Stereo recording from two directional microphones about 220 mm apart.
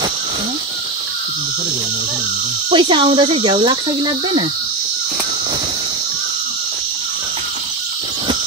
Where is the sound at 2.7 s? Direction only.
20° right (ahead or behind).